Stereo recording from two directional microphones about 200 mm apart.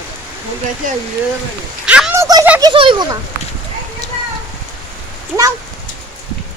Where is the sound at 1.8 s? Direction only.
5° right (ahead or behind).